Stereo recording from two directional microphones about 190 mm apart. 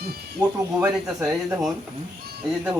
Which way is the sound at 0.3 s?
5° right (ahead or behind).